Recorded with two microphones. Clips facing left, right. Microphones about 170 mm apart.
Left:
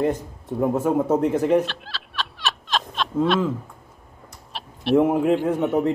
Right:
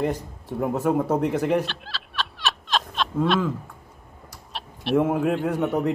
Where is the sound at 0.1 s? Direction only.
10° right (ahead or behind).